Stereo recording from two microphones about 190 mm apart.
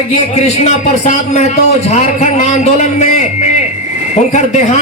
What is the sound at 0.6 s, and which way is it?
Speech, 40° left (ahead or behind).